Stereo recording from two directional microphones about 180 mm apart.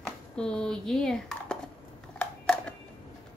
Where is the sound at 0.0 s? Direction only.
5° left (ahead or behind).